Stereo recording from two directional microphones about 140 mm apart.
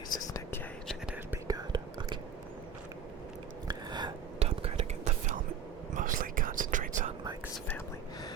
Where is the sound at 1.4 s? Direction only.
30° right (ahead or behind).